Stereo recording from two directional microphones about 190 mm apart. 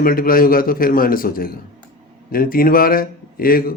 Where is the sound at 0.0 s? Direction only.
50° left (ahead or behind).